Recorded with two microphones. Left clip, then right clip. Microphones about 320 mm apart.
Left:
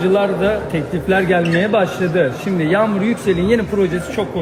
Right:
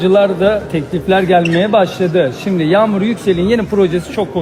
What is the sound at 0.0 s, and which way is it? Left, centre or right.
A man's voice, right.